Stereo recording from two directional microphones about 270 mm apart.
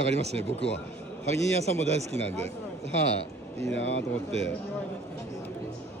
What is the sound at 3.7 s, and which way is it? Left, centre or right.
Speech, left.